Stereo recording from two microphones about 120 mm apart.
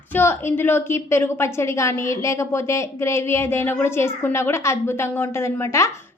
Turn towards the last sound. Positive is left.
turn(degrees=25)  # may be behind; listen again after turning